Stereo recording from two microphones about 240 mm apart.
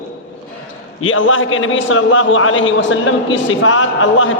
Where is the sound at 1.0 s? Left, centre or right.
Left.